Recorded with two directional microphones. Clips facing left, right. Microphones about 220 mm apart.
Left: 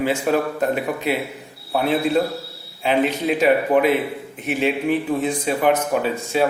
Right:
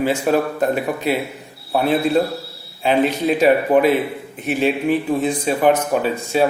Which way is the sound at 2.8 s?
35° right (ahead or behind).